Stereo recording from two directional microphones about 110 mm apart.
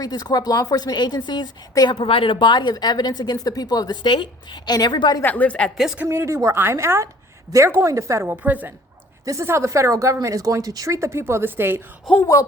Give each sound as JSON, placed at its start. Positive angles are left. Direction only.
{"t": 0.0, "sound": "speech", "side_deg": 35}
{"t": 2.0, "sound": "speech", "side_deg": 55}
{"t": 5.2, "sound": "speech", "side_deg": 15}
{"t": 5.7, "sound": "speech", "side_deg": -5}
{"t": 6.1, "sound": "speech", "side_deg": -25}
{"t": 8.3, "sound": "a woman's voice", "side_deg": -15}
{"t": 9.2, "sound": "speech", "side_deg": -25}
{"t": 12.2, "sound": "speech", "side_deg": 30}